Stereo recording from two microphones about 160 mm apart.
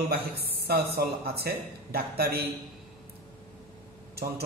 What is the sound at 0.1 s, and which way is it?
Speech, 80° right.